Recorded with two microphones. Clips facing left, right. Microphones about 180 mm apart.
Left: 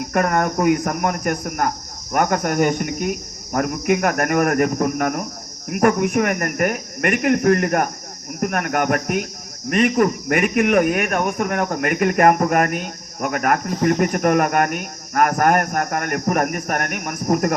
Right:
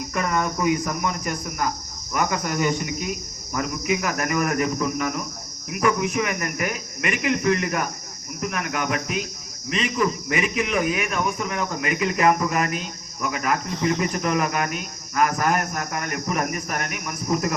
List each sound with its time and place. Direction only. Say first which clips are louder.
0.1 s speech: left 6 dB; 60° left (ahead or behind)